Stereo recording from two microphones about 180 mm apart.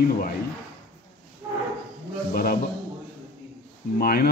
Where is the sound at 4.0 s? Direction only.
55° left (ahead or behind).